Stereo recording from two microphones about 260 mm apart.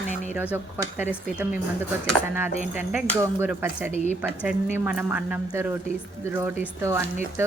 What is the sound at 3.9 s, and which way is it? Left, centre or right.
Speech, left.